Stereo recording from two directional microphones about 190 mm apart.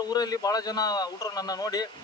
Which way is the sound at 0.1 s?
20° left (ahead or behind).